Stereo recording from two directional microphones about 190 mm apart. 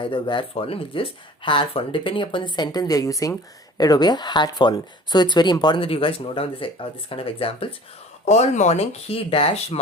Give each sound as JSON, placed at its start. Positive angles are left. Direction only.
{"t": 0.0, "sound": "speech", "side_deg": 25}